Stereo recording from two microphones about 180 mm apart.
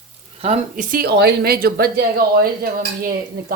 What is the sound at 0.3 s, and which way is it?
A woman's voice, 35° right (ahead or behind).